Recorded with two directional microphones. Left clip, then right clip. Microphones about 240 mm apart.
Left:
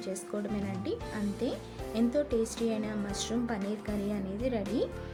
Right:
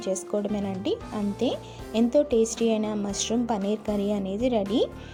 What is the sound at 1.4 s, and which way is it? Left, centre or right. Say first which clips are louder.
Speech: right 9 dB; right.